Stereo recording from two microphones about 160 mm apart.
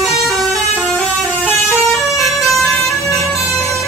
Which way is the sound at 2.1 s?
Centre (ahead or behind).